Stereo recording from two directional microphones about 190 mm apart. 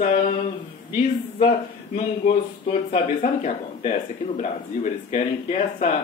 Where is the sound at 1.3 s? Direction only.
35° left (ahead or behind).